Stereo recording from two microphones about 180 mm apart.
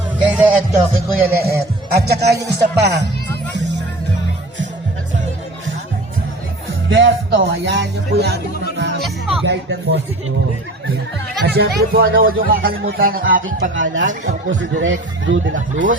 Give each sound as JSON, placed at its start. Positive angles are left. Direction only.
{"t": 0.3, "sound": "music", "side_deg": -10}
{"t": 0.9, "sound": "speech", "side_deg": -60}
{"t": 6.9, "sound": "speech", "side_deg": -90}
{"t": 9.4, "sound": "speech", "side_deg": -70}
{"t": 11.4, "sound": "speech", "side_deg": -60}
{"t": 13.6, "sound": "speech", "side_deg": -90}
{"t": 14.1, "sound": "speech", "side_deg": -45}
{"t": 14.6, "sound": "speech", "side_deg": -90}
{"t": 15.5, "sound": "speech", "side_deg": -45}